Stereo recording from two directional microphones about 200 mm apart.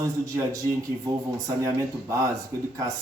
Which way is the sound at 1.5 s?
15° right (ahead or behind).